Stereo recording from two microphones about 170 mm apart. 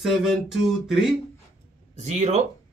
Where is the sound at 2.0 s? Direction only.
40° right (ahead or behind).